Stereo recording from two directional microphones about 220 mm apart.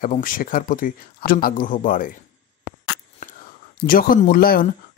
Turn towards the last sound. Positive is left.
turn(degrees=40)  # may be behind; listen again after turning